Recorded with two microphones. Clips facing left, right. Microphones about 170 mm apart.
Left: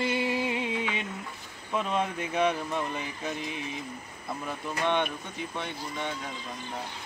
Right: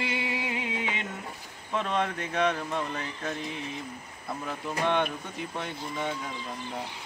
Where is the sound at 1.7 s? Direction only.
10° left (ahead or behind).